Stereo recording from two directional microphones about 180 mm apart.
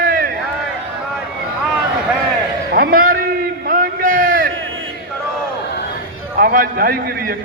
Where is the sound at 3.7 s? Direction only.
50° right (ahead or behind).